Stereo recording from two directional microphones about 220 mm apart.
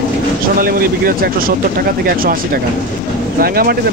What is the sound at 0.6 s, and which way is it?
A man's voice, 40° right (ahead or behind).